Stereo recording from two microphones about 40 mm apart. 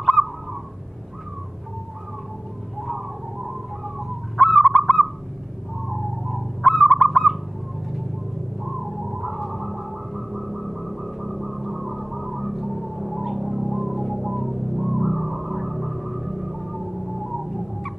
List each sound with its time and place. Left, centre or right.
0.0 s owl: centre
4.4 s bird: centre
6.6 s bird: centre
8.6 s a sound: centre